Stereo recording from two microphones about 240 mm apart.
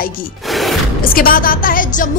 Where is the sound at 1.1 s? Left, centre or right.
Left.